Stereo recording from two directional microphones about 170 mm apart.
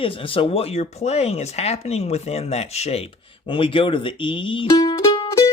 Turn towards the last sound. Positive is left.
turn(degrees=25)  # may be behind; listen again after turning